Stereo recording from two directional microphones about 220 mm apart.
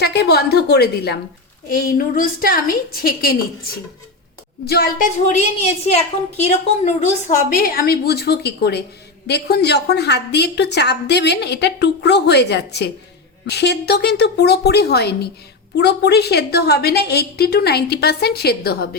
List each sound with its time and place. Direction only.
0.0 s a woman's voice: 45° left (ahead or behind)
4.6 s a woman's voice: 45° left (ahead or behind)